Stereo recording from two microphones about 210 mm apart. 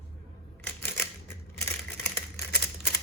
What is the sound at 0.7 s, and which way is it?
Typewriter, 10° left (ahead or behind).